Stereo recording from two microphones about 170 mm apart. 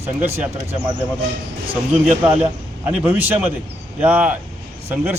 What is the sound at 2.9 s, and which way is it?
A man's voice, 10° right (ahead or behind).